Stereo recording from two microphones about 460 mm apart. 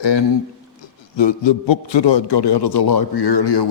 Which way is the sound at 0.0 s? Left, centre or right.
Left.